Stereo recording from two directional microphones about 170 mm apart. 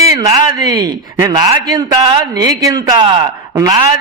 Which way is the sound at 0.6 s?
20° right (ahead or behind).